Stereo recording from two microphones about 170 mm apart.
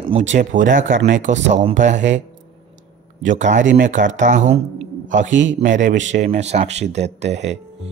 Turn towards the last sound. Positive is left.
turn(degrees=-40)  # may be behind; listen again after turning